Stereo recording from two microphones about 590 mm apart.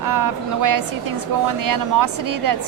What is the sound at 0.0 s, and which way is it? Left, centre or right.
A woman's voice, right.